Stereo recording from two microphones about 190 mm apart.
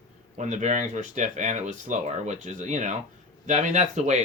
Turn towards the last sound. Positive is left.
turn(degrees=-40)  # may be behind; listen again after turning